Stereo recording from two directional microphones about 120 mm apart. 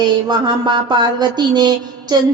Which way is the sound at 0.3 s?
40° right (ahead or behind).